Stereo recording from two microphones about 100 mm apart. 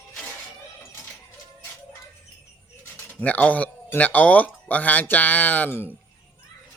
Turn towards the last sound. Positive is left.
turn(degrees=20)  # may be behind; listen again after turning